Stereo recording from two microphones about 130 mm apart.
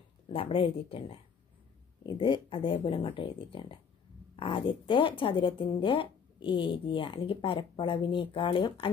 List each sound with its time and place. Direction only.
0.3 s speech: 45° left (ahead or behind)